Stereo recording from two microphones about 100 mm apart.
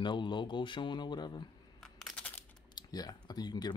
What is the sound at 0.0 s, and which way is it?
Speech, 50° left (ahead or behind).